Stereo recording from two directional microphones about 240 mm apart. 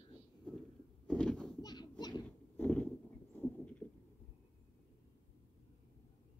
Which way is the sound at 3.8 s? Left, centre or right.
Centre.